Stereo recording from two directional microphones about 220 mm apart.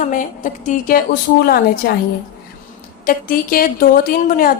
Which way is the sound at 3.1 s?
40° left (ahead or behind).